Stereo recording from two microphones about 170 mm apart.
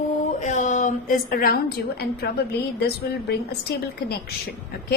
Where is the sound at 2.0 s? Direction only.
70° left (ahead or behind).